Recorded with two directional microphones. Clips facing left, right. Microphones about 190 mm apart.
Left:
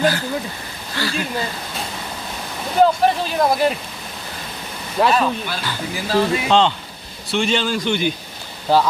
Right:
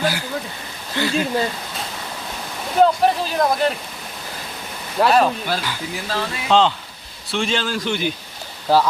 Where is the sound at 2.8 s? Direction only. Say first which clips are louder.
Even; centre (ahead or behind).